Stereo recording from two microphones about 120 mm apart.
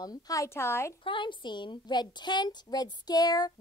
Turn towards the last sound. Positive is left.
turn(degrees=35)  # may be behind; listen again after turning